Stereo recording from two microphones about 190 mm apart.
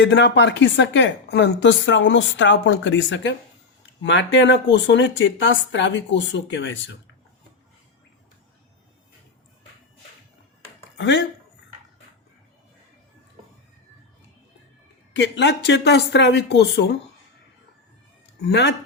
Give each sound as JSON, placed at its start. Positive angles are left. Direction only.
{"t": 0.0, "sound": "speech", "side_deg": 65}
{"t": 10.9, "sound": "speech", "side_deg": 70}
{"t": 15.1, "sound": "speech", "side_deg": 70}
{"t": 18.4, "sound": "speech", "side_deg": 65}